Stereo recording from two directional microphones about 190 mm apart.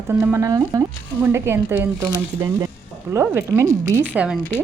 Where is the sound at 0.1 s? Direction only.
10° right (ahead or behind).